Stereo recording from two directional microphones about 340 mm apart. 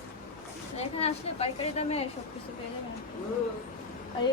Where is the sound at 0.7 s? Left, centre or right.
Centre.